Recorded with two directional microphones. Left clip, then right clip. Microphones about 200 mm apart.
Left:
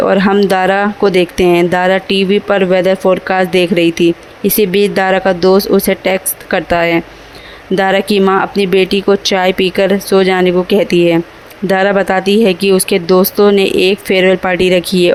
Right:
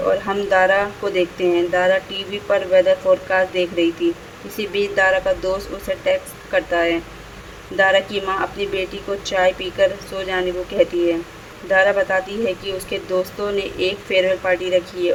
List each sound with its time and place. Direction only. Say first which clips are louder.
0.1 s speech: left 8 dB; 50° left (ahead or behind)